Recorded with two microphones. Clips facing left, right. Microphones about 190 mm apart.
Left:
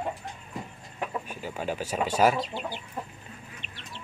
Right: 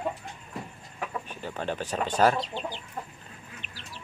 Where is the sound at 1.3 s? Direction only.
10° left (ahead or behind).